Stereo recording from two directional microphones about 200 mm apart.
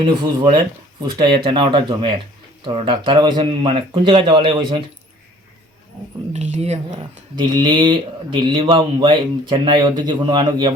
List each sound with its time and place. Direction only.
0.0 s a man's voice: 20° right (ahead or behind)
6.3 s speech: 35° right (ahead or behind)
7.3 s a man's voice: 20° right (ahead or behind)